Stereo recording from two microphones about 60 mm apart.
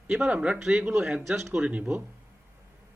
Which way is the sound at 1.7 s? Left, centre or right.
Right.